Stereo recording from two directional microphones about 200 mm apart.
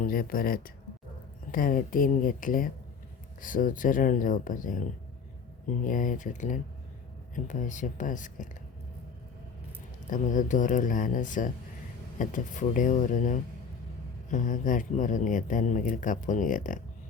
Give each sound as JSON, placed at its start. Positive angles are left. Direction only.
{"t": 0.0, "sound": "speech", "side_deg": 45}
{"t": 10.1, "sound": "speech", "side_deg": 40}